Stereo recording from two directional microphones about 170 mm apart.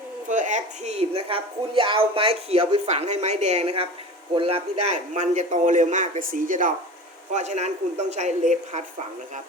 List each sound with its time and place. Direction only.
0.3 s a woman's voice: 45° right (ahead or behind)